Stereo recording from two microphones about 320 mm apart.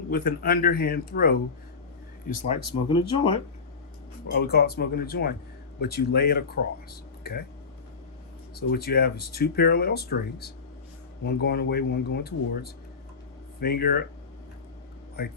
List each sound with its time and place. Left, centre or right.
0.1 s speech: left
2.5 s speech: centre
4.3 s speech: left
8.5 s speech: left
15.2 s speech: left